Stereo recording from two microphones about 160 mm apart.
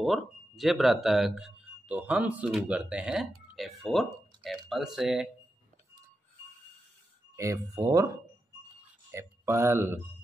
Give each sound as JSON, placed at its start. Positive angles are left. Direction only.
{"t": 0.0, "sound": "speech", "side_deg": 0}
{"t": 7.3, "sound": "speech", "side_deg": -20}
{"t": 9.1, "sound": "speech", "side_deg": -15}